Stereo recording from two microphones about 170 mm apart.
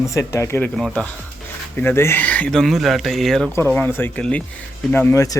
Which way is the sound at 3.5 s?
10° left (ahead or behind).